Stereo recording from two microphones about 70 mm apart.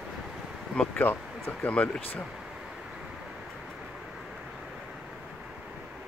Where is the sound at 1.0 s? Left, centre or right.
Left.